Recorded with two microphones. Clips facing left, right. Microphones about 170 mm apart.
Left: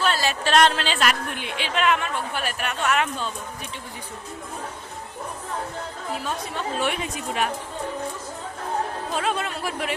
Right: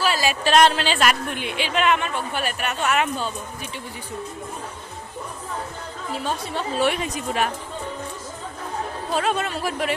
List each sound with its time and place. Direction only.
0.0 s a woman's voice: 10° right (ahead or behind)
6.2 s speech: 35° right (ahead or behind)
9.1 s speech: 40° right (ahead or behind)